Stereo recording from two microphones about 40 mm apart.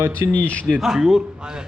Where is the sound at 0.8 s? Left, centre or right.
Centre.